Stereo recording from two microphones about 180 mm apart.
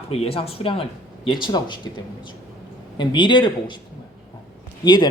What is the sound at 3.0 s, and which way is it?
Speech, 25° left (ahead or behind).